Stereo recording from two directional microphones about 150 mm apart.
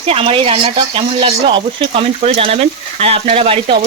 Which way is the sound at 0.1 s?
40° right (ahead or behind).